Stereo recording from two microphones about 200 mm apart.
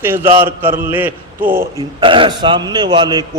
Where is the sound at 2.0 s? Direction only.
25° right (ahead or behind).